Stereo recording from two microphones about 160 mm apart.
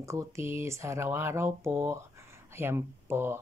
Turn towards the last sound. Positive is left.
turn(degrees=-15)  # may be behind; listen again after turning